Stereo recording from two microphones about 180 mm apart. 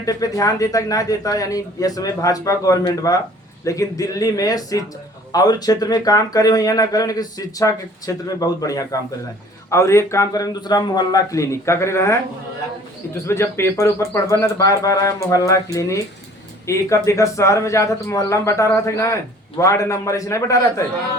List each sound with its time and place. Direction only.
0.0 s a man's voice: 20° left (ahead or behind)
13.2 s a man's voice: 15° left (ahead or behind)